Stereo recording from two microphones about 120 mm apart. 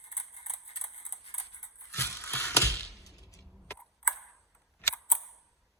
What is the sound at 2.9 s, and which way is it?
Music, 25° left (ahead or behind).